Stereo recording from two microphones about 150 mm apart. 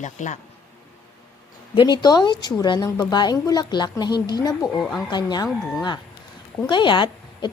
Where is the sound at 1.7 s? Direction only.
30° left (ahead or behind).